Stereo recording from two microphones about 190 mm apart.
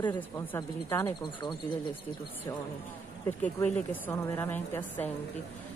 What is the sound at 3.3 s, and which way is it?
Speech, 10° left (ahead or behind).